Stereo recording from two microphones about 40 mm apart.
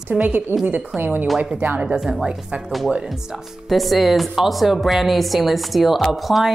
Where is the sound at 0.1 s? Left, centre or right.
Centre.